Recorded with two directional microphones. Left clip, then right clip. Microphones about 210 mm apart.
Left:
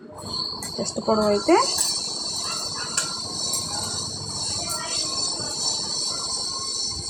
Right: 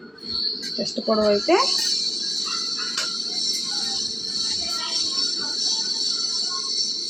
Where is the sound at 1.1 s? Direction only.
15° left (ahead or behind).